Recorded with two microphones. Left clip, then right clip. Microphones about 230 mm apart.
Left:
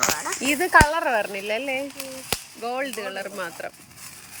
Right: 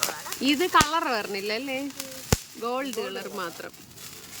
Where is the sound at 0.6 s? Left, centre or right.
Centre.